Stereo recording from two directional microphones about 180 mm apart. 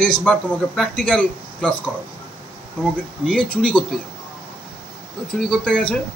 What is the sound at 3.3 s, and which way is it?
Speech, 5° left (ahead or behind).